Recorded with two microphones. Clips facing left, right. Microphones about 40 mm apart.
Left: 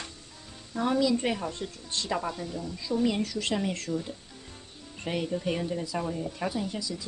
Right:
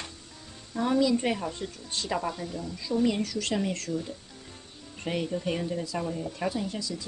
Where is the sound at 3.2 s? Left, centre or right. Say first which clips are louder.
Even; centre.